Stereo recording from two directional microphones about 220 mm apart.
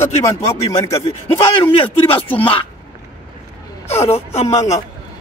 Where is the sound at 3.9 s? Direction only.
30° left (ahead or behind).